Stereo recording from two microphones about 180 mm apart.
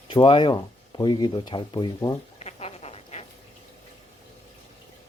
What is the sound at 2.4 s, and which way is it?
Duck, 35° left (ahead or behind).